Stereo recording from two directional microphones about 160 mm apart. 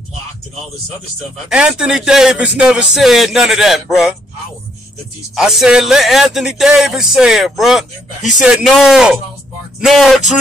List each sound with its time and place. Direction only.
1.5 s speech: 5° right (ahead or behind)
5.3 s speech: 5° right (ahead or behind)